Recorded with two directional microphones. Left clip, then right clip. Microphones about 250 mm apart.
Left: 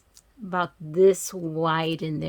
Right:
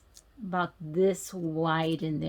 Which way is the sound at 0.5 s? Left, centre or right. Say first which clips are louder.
Left 4 dB; left.